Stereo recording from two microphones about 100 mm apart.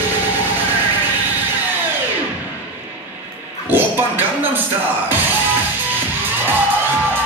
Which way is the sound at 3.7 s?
20° right (ahead or behind).